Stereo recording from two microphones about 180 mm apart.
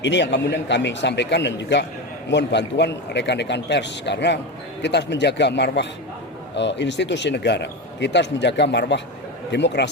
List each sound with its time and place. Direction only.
0.0 s speech: 75° left (ahead or behind)